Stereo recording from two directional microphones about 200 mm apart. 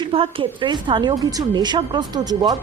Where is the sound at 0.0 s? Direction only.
25° right (ahead or behind).